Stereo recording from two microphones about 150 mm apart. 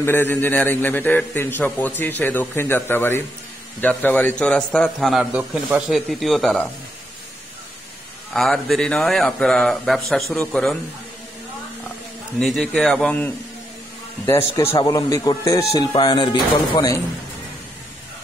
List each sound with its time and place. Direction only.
0.0 s a man's voice: 15° left (ahead or behind)
5.3 s speech: 5° right (ahead or behind)
8.3 s speech: centre (ahead or behind)
12.4 s speech: centre (ahead or behind)
14.2 s speech: 20° left (ahead or behind)